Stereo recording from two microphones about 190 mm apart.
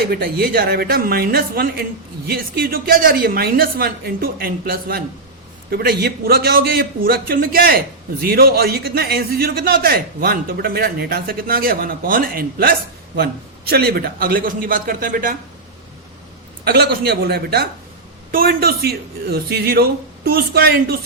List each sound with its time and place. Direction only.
0.0 s a man's voice: 55° right (ahead or behind)
16.6 s a man's voice: 55° right (ahead or behind)